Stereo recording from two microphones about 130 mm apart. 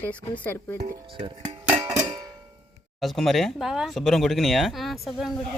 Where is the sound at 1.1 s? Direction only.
40° right (ahead or behind).